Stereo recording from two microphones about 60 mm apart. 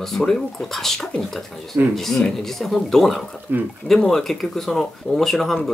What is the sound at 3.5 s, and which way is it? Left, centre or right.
Speech, right.